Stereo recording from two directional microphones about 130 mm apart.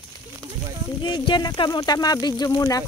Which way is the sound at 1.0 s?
40° left (ahead or behind).